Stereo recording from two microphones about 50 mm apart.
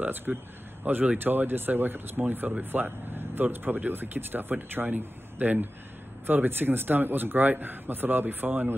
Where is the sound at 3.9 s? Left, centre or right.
Right.